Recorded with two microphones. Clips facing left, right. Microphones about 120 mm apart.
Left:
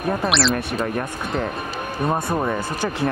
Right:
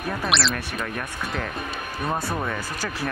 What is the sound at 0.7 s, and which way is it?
Speech, 30° left (ahead or behind).